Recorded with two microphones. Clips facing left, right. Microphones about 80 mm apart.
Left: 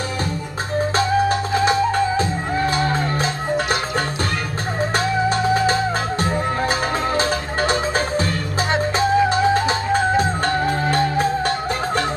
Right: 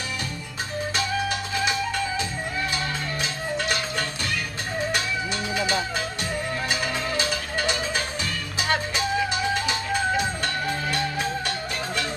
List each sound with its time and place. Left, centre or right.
0.9 s music: left
4.9 s music: left